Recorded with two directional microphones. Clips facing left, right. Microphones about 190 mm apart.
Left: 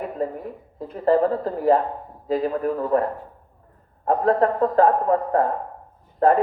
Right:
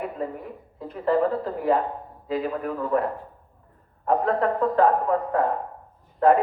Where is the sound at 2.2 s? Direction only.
40° left (ahead or behind).